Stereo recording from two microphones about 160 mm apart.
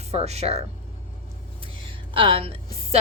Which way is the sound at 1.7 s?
35° right (ahead or behind).